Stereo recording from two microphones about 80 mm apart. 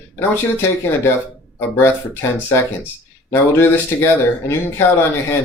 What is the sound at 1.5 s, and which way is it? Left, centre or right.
Speech, left.